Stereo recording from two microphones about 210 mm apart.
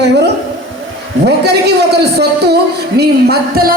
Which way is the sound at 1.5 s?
50° right (ahead or behind).